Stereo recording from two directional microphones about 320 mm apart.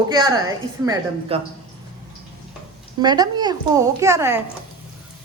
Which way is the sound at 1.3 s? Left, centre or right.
Centre.